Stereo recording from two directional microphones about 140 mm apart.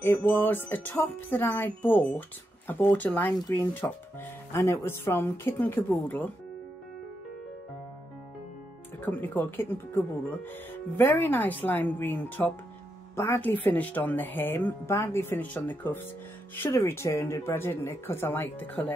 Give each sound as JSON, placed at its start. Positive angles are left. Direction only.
{"t": 0.0, "sound": "speech", "side_deg": 15}
{"t": 9.0, "sound": "speech", "side_deg": 10}